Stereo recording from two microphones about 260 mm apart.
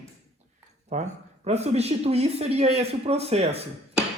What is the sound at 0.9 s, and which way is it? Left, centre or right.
Speech, right.